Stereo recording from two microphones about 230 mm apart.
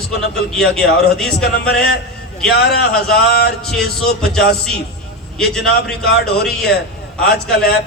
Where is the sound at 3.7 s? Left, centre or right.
Centre.